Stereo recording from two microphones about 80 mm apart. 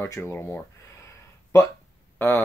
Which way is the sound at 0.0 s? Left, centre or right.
Left.